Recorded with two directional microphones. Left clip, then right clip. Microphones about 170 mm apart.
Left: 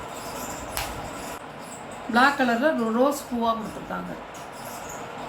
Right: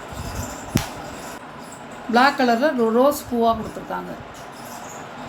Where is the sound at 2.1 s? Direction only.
50° right (ahead or behind).